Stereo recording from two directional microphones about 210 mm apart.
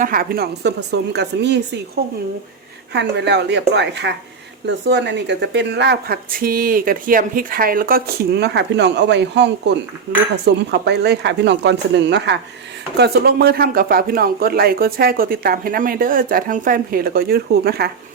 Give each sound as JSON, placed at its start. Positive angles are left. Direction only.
{"t": 0.0, "sound": "speech", "side_deg": -45}